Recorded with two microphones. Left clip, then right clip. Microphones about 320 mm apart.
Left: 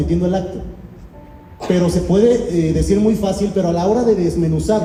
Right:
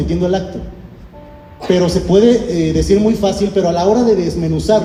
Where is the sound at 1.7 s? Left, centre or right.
Right.